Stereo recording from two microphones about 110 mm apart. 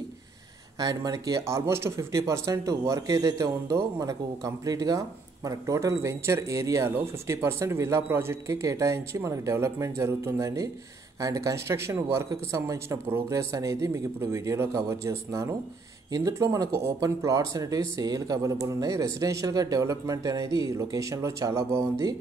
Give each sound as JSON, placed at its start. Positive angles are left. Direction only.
{"t": 0.7, "sound": "speech", "side_deg": -35}